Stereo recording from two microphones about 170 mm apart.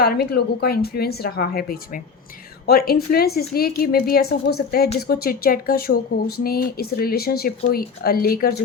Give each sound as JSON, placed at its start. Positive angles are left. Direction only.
{"t": 0.0, "sound": "speech", "side_deg": 70}